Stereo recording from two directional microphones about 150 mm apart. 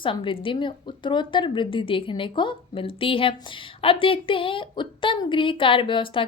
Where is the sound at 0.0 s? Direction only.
35° left (ahead or behind).